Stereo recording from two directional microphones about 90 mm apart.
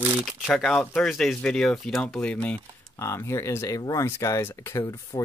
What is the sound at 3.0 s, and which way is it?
Speech, 30° left (ahead or behind).